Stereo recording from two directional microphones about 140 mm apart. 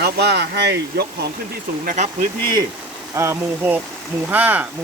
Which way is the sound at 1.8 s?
80° right.